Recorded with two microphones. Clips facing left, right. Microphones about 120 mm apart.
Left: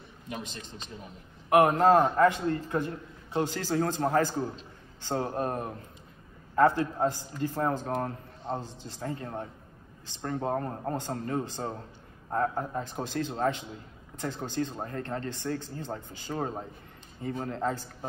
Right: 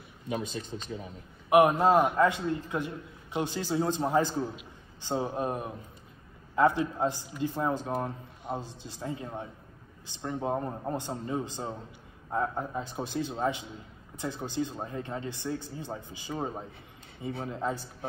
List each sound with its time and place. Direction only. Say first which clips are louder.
1.5 s a man's voice: left 1 dB; 15° right (ahead or behind)